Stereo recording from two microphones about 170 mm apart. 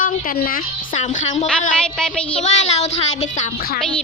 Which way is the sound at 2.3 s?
40° left (ahead or behind).